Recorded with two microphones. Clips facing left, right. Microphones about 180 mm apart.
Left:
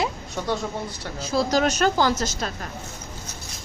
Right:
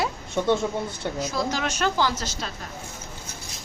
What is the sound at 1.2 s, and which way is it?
A woman's voice, 30° left (ahead or behind).